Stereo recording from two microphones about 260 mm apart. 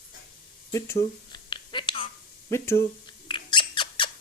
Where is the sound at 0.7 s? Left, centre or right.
Centre.